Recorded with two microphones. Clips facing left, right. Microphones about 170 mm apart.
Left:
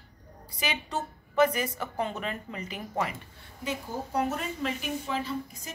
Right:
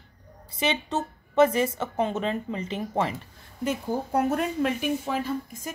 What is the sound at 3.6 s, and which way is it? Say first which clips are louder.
A woman's voice: right 6 dB; 55° right (ahead or behind).